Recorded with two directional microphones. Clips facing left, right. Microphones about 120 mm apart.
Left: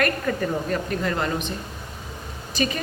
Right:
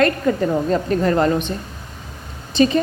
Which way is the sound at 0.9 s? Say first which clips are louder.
Right 8 dB; 35° right (ahead or behind).